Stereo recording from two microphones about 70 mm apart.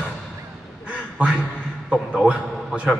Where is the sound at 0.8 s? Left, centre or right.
Centre.